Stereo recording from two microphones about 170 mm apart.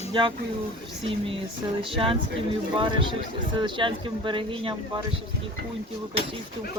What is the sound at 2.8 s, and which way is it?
Speech, 30° right (ahead or behind).